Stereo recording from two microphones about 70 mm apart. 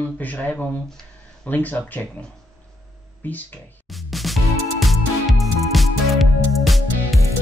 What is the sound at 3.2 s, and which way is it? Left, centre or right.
Speech, left.